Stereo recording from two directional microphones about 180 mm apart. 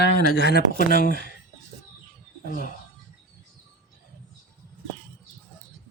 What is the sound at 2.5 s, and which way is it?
Speech, 50° left (ahead or behind).